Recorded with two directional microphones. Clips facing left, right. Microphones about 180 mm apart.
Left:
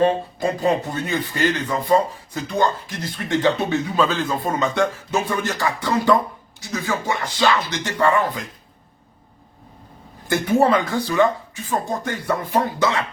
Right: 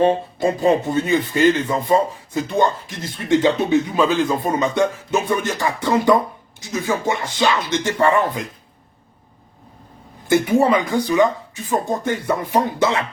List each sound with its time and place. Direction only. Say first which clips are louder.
0.0 s speech: right 2 dB; 25° right (ahead or behind)
10.2 s speech: right 2 dB; 15° right (ahead or behind)